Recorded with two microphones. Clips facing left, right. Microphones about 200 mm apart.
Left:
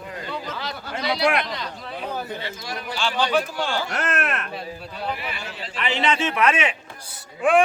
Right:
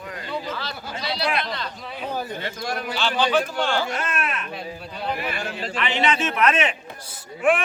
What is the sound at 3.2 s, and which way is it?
Speech, centre (ahead or behind).